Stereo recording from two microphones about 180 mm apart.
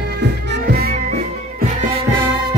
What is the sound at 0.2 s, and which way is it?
Music, 65° right (ahead or behind).